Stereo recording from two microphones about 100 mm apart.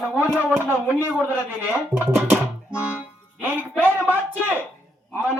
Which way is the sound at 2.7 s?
10° right (ahead or behind).